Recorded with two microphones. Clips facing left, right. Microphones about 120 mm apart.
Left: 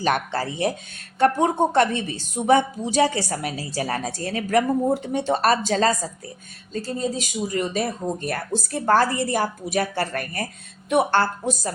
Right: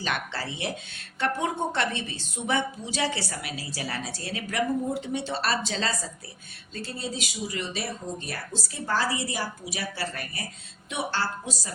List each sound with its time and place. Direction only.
0.0 s speech: 45° left (ahead or behind)